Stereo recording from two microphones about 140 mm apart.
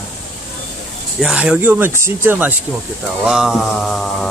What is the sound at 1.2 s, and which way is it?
Speech, 5° right (ahead or behind).